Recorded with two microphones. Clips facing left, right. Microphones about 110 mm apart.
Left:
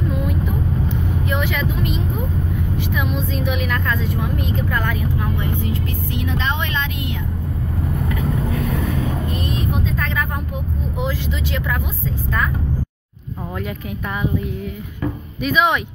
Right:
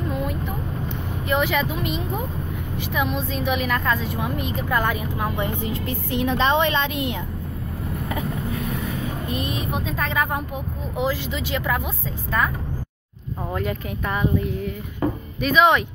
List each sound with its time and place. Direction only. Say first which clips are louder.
1.3 s vehicle: right 4 dB; 5° right (ahead or behind)
2.8 s a woman's voice: right 2 dB; centre (ahead or behind)
5.7 s a woman's voice: left 1 dB; 25° right (ahead or behind)
9.4 s a woman's voice: left 3 dB; 10° right (ahead or behind)
13.6 s a woman's voice: right 1 dB; 5° left (ahead or behind)
15.4 s speech: right 1 dB; 5° left (ahead or behind)